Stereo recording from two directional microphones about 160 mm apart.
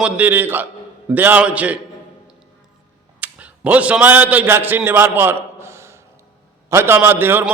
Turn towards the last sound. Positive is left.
turn(degrees=-15)  # may be behind; listen again after turning